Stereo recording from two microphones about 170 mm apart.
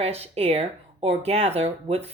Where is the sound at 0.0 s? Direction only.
35° right (ahead or behind).